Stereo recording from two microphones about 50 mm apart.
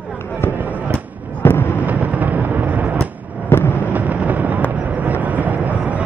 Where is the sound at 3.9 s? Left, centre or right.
Right.